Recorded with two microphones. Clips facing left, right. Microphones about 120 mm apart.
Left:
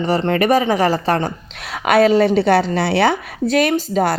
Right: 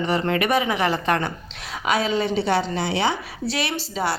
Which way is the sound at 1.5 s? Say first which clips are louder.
Left 8 dB; 65° left (ahead or behind).